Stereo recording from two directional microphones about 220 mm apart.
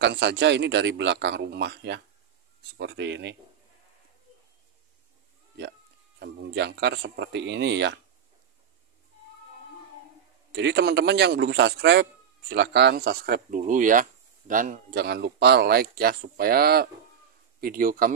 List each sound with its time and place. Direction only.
0.0 s a man's voice: 55° right (ahead or behind)
5.6 s speech: 50° right (ahead or behind)
10.5 s a man's voice: 55° right (ahead or behind)